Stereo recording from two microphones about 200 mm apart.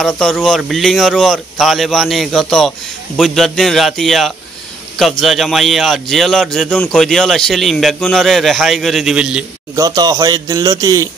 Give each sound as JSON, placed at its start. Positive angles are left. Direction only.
{"t": 0.0, "sound": "speech", "side_deg": 0}
{"t": 9.8, "sound": "a man's voice", "side_deg": -20}